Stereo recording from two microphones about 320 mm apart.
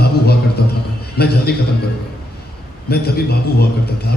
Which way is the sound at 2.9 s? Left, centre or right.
Left.